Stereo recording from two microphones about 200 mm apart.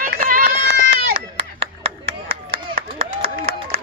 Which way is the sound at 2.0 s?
30° right (ahead or behind).